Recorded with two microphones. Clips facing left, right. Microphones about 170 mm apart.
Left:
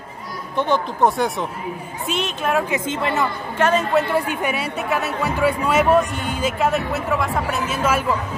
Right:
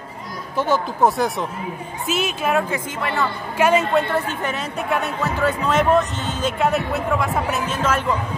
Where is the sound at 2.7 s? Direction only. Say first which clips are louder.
Left 3 dB; 25° left (ahead or behind).